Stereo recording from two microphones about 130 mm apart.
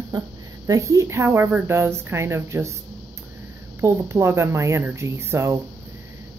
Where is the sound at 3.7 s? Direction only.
20° right (ahead or behind).